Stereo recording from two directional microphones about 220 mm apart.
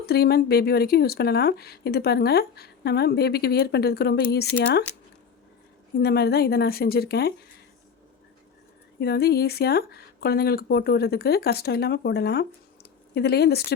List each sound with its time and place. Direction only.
0.0 s speech: 45° left (ahead or behind)
6.0 s speech: 45° left (ahead or behind)
9.0 s speech: 45° left (ahead or behind)